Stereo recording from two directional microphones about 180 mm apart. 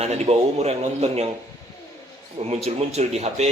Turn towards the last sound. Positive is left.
turn(degrees=-35)  # may be behind; listen again after turning